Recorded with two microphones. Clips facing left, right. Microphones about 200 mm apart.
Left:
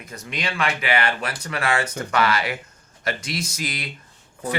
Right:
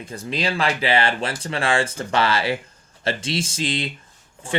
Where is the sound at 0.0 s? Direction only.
30° right (ahead or behind).